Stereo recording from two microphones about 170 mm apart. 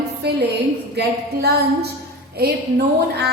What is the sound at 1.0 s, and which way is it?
Speech, 80° right.